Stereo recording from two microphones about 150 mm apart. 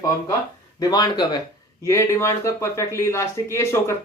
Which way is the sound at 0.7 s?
25° left (ahead or behind).